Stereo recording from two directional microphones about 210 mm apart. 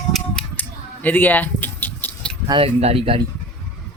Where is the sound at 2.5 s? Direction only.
30° right (ahead or behind).